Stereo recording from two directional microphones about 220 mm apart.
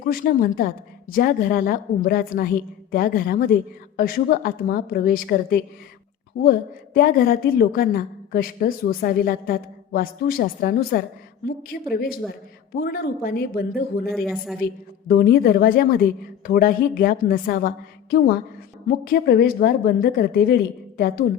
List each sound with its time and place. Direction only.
0.0 s a woman's voice: 40° left (ahead or behind)